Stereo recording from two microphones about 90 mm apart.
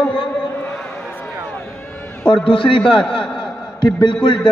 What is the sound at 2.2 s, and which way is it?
Speech, 75° left (ahead or behind).